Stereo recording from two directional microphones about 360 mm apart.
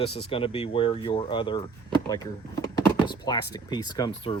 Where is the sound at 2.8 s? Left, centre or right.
Centre.